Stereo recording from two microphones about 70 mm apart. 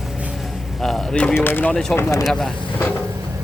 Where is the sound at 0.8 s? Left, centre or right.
Centre.